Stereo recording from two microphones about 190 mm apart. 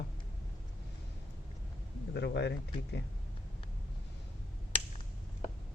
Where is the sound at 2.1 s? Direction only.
65° left (ahead or behind).